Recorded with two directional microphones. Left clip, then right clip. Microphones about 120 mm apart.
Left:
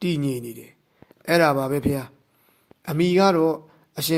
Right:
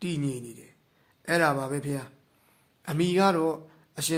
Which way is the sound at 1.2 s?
55° left (ahead or behind).